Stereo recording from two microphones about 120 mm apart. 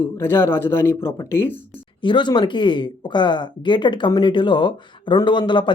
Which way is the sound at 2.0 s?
40° left (ahead or behind).